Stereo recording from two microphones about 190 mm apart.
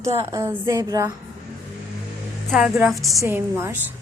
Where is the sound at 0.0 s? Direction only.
15° right (ahead or behind).